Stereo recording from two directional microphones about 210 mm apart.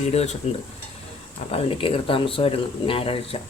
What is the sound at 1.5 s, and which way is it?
Speech, 25° left (ahead or behind).